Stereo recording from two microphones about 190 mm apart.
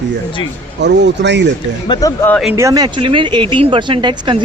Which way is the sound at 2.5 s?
20° right (ahead or behind).